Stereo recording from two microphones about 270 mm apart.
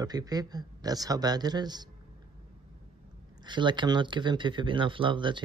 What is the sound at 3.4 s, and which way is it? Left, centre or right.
Speech, centre.